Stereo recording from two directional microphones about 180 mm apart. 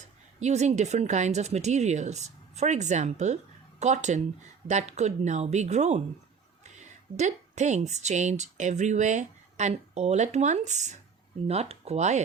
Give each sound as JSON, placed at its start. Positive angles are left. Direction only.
{"t": 0.3, "sound": "a woman's voice", "side_deg": -40}